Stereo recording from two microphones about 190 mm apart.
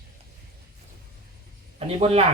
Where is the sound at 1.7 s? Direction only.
30° right (ahead or behind).